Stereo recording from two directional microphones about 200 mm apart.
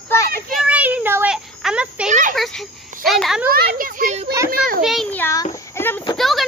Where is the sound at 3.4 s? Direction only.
50° right (ahead or behind).